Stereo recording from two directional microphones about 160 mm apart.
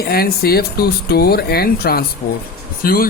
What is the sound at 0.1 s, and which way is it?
A woman's voice, 75° left (ahead or behind).